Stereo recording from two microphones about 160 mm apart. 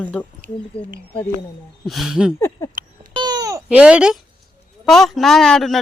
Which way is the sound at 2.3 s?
15° left (ahead or behind).